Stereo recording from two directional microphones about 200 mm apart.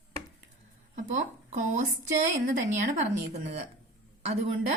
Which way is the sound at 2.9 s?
35° right (ahead or behind).